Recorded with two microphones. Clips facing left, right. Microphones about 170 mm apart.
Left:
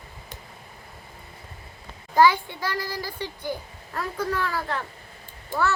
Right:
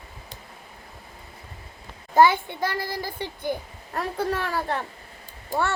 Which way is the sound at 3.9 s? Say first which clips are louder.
Right 2 dB; 30° right (ahead or behind).